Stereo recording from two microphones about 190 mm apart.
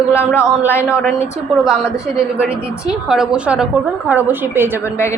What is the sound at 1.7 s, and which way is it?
A woman's voice, 5° right (ahead or behind).